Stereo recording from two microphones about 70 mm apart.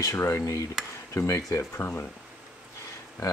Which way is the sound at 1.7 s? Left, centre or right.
Left.